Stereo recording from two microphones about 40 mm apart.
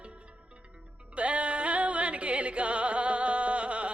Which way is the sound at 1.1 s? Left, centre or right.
Right.